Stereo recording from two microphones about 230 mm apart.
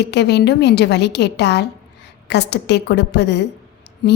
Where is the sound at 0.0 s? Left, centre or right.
Left.